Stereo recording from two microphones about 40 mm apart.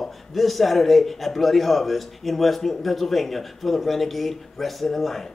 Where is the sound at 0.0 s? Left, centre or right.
Centre.